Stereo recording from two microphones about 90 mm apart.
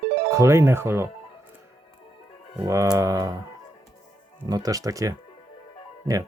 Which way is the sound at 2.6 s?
35° right (ahead or behind).